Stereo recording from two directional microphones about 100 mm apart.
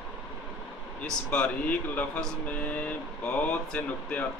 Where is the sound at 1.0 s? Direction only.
10° left (ahead or behind).